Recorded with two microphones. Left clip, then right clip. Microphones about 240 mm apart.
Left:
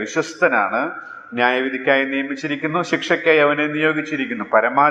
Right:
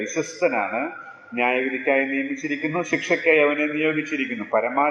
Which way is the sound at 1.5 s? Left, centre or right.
Centre.